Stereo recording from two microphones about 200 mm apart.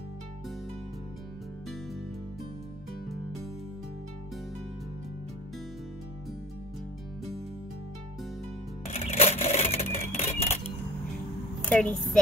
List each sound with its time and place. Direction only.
8.8 s cash register: 30° left (ahead or behind)
11.7 s a woman's voice: 5° left (ahead or behind)